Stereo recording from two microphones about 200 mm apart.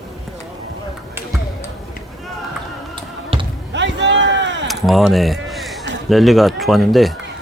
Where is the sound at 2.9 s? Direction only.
25° right (ahead or behind).